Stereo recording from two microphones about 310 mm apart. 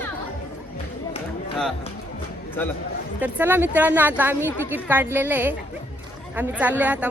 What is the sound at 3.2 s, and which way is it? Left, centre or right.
A man's voice, centre.